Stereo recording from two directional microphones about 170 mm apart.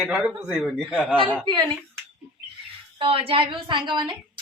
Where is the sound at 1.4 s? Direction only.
25° right (ahead or behind).